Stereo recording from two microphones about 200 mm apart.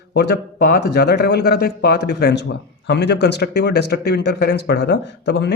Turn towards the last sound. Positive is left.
turn(degrees=60)  # may be behind; listen again after turning